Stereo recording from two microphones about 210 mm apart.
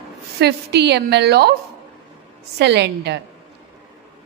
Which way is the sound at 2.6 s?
55° right (ahead or behind).